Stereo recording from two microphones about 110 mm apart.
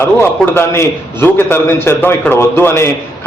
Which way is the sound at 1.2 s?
20° left (ahead or behind).